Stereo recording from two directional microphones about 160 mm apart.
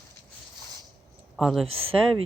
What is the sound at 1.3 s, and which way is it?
Speech, centre (ahead or behind).